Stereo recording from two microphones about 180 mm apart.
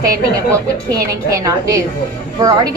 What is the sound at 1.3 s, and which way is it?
A woman's voice, 20° right (ahead or behind).